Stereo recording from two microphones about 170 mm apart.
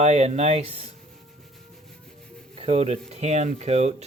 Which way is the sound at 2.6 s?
35° right (ahead or behind).